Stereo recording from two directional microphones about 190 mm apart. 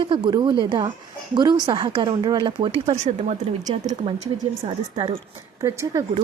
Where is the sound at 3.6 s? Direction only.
20° right (ahead or behind).